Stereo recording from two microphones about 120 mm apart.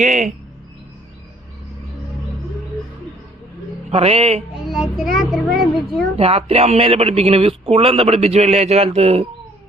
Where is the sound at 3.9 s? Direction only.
60° right (ahead or behind).